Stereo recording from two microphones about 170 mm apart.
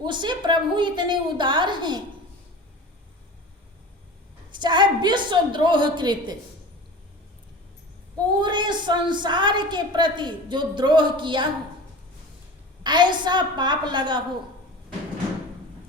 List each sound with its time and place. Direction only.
0.0 s a woman's voice: 25° right (ahead or behind)
4.5 s a woman's voice: 25° right (ahead or behind)
8.4 s a woman's voice: 25° right (ahead or behind)
12.8 s a woman's voice: 25° right (ahead or behind)